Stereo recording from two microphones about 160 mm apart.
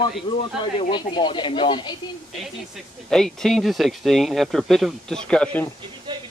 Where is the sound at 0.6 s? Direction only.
30° left (ahead or behind).